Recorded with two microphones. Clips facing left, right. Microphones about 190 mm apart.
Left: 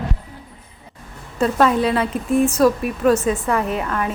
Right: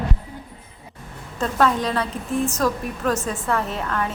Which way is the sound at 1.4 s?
10° left (ahead or behind).